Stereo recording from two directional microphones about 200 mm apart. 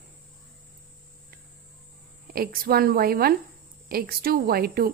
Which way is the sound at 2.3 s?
50° right (ahead or behind).